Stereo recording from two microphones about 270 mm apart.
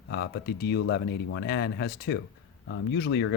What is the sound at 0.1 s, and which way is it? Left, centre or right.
Speech, left.